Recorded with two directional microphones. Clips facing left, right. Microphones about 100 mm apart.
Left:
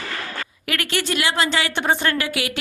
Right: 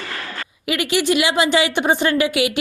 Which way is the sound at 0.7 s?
15° right (ahead or behind).